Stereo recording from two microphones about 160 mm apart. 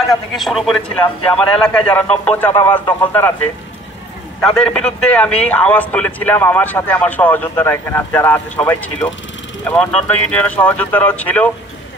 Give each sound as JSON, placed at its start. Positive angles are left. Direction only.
{"t": 0.1, "sound": "a man's voice", "side_deg": 0}
{"t": 4.5, "sound": "a man's voice", "side_deg": 5}